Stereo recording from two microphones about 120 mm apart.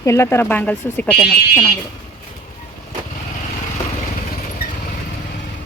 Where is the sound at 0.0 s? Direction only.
25° left (ahead or behind).